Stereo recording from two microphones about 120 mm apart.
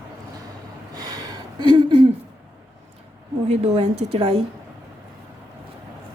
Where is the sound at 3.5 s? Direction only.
65° right (ahead or behind).